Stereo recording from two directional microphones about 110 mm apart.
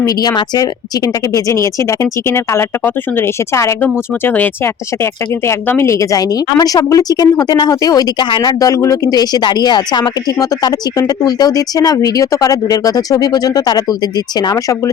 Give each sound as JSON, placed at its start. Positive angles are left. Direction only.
{"t": 0.0, "sound": "speech", "side_deg": 35}